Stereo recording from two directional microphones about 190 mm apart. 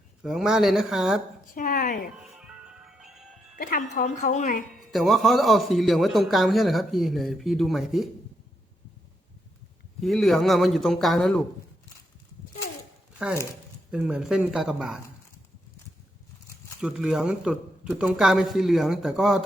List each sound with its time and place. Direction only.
0.2 s speech: centre (ahead or behind)
1.5 s a woman's voice: 45° left (ahead or behind)
2.3 s music: 5° right (ahead or behind)
3.6 s speech: 45° left (ahead or behind)
4.9 s speech: centre (ahead or behind)
10.0 s speech: centre (ahead or behind)
13.1 s speech: 5° right (ahead or behind)
16.8 s speech: centre (ahead or behind)